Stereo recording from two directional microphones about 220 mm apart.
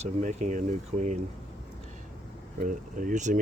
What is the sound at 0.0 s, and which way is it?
Speech, 35° right (ahead or behind).